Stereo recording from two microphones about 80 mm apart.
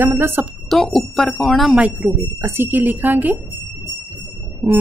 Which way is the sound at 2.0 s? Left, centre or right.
Right.